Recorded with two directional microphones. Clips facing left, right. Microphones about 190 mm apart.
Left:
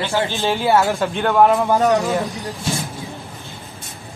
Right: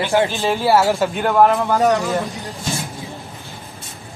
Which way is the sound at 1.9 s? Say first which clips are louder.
Left 1 dB; 15° left (ahead or behind).